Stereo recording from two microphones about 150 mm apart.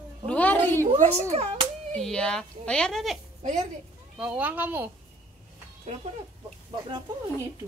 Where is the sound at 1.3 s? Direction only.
45° right (ahead or behind).